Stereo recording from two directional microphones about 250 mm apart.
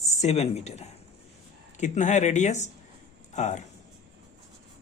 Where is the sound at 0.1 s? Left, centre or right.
Left.